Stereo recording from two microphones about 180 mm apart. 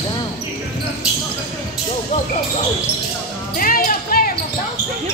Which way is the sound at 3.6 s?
50° left (ahead or behind).